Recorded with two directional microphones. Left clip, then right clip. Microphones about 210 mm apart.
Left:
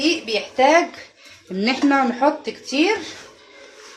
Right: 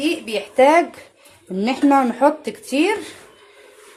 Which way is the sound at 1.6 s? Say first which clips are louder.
Right 2 dB; 30° right (ahead or behind).